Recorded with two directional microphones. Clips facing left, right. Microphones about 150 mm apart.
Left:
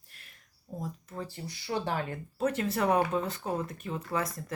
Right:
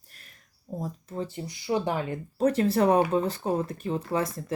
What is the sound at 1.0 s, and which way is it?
Speech, 25° right (ahead or behind).